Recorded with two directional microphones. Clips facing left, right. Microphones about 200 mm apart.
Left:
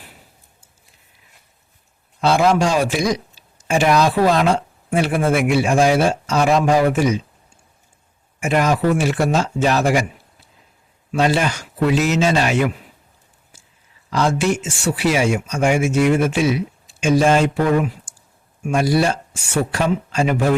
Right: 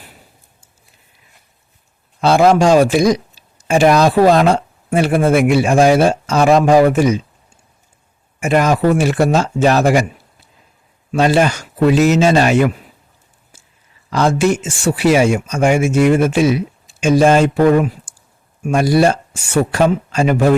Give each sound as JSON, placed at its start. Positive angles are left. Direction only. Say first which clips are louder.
{"t": 2.2, "sound": "speech", "louder": "right 5 dB", "side_deg": -40}
{"t": 8.4, "sound": "speech", "louder": "right 4 dB", "side_deg": -45}
{"t": 11.1, "sound": "speech", "louder": "right 5 dB", "side_deg": -45}
{"t": 14.1, "sound": "speech", "louder": "right 4 dB", "side_deg": -45}